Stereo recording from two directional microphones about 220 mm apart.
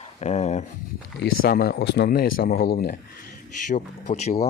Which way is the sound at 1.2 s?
45° left (ahead or behind).